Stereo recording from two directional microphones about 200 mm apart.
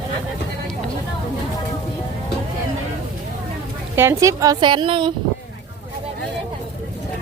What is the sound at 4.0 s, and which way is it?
A woman's voice, 15° right (ahead or behind).